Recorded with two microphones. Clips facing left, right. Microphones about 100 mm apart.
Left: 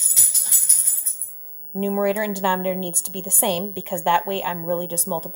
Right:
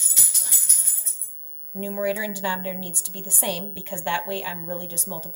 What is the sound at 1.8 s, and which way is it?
A woman's voice, 55° left (ahead or behind).